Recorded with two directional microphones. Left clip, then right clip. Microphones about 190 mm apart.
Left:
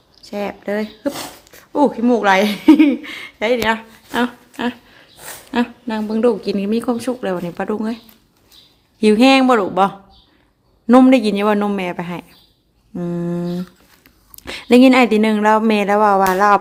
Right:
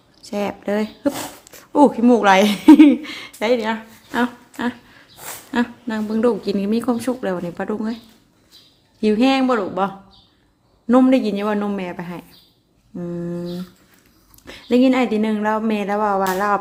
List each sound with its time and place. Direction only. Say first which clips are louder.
0.2 s speech: even; 10° right (ahead or behind); by 7.9 s 15° left (ahead or behind)
9.0 s speech: left 5 dB; 20° left (ahead or behind)